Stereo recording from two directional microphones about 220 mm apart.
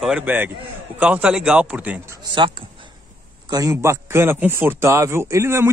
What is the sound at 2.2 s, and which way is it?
A man's voice, 20° right (ahead or behind).